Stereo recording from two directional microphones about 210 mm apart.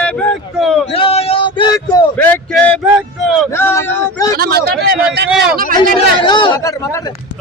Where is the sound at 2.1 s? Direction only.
10° left (ahead or behind).